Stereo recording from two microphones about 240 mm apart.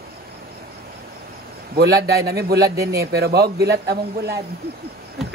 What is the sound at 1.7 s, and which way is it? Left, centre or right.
A man's voice, right.